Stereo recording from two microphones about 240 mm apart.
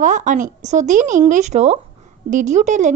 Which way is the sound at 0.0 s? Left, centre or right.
Right.